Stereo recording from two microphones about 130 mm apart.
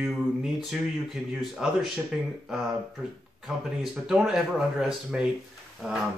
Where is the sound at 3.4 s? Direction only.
5° right (ahead or behind).